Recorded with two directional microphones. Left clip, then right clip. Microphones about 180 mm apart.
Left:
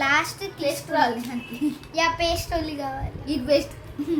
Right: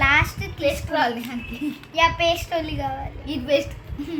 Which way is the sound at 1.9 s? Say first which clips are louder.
Right 4 dB; centre (ahead or behind).